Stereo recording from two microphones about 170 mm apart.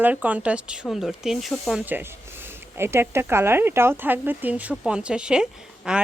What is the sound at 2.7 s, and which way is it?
Speech, 15° right (ahead or behind).